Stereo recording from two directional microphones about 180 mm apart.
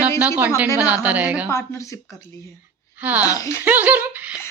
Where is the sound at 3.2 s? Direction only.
20° left (ahead or behind).